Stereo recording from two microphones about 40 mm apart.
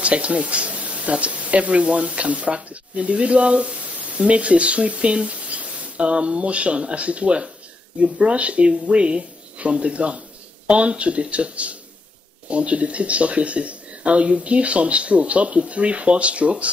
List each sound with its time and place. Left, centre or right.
0.0 s speech: right